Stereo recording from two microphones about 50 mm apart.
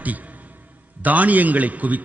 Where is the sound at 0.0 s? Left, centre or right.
Right.